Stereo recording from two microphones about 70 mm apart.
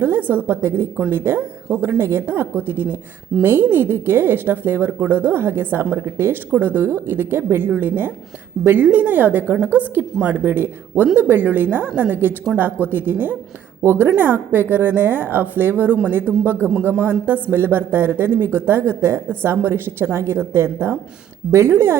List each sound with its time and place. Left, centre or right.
0.0 s a woman's voice: right